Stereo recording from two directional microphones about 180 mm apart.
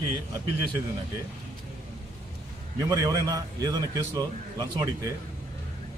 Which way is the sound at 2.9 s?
20° right (ahead or behind).